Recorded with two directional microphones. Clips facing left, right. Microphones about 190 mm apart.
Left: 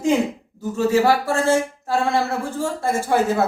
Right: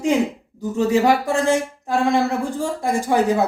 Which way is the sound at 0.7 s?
15° right (ahead or behind).